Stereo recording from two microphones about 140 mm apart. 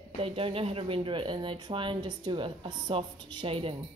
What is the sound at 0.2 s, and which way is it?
A woman's voice, 40° right (ahead or behind).